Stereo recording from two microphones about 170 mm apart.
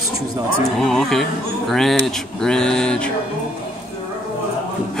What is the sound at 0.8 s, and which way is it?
Speech, centre (ahead or behind).